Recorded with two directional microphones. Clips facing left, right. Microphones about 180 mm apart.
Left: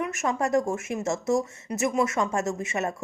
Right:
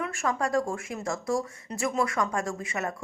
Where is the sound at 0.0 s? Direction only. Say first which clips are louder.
Left 2 dB; 20° left (ahead or behind).